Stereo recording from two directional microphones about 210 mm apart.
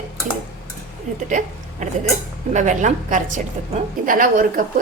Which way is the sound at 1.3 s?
35° right (ahead or behind).